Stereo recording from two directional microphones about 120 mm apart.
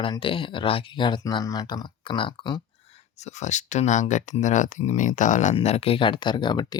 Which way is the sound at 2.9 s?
65° left (ahead or behind).